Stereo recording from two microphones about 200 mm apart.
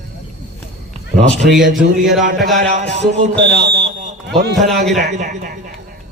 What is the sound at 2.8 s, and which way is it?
Speech, 35° right (ahead or behind).